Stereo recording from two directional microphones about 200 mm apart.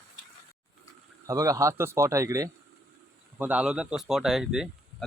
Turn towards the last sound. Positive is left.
turn(degrees=0)  # may be behind; listen again after turning